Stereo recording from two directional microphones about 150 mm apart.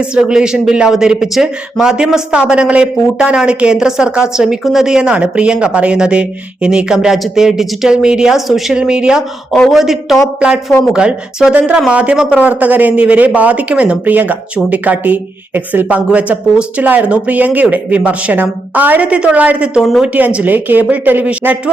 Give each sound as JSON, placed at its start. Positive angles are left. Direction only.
{"t": 0.0, "sound": "speech", "side_deg": -5}